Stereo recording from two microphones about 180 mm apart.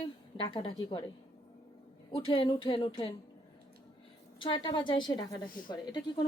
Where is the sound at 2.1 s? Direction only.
30° left (ahead or behind).